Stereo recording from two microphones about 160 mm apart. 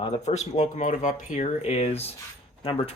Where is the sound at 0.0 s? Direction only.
45° left (ahead or behind).